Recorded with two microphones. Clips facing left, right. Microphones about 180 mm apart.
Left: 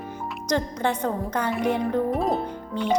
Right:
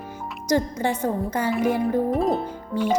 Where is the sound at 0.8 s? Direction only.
65° left (ahead or behind).